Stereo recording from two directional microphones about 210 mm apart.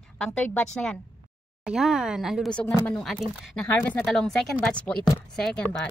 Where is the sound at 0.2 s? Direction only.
5° left (ahead or behind).